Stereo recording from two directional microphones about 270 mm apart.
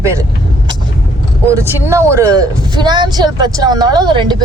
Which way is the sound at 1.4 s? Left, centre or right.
Centre.